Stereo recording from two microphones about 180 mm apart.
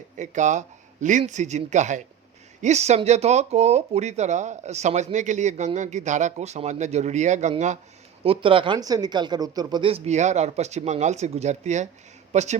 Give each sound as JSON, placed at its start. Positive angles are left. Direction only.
{"t": 0.2, "sound": "speech", "side_deg": -40}
{"t": 8.2, "sound": "speech", "side_deg": -30}